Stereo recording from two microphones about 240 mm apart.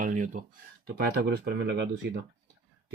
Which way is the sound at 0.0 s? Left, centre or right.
Right.